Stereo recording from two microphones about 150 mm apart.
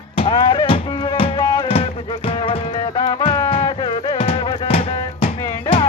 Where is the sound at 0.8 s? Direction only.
30° left (ahead or behind).